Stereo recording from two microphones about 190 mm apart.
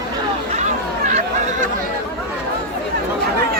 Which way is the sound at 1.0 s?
40° right (ahead or behind).